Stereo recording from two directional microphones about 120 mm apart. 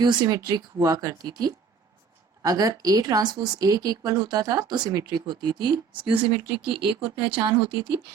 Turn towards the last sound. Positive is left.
turn(degrees=-45)  # may be behind; listen again after turning